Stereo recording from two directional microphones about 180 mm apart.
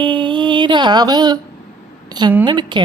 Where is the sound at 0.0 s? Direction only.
25° right (ahead or behind).